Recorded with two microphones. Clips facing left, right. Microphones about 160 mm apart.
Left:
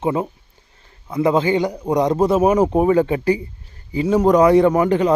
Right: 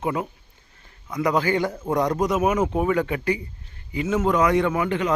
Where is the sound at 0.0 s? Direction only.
25° left (ahead or behind).